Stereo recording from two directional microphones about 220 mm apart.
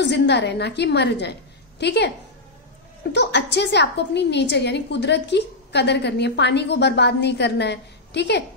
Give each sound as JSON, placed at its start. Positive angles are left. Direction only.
{"t": 0.0, "sound": "a woman's voice", "side_deg": 50}
{"t": 3.1, "sound": "a woman's voice", "side_deg": 50}